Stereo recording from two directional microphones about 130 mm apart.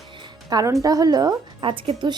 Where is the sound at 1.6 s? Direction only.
40° right (ahead or behind).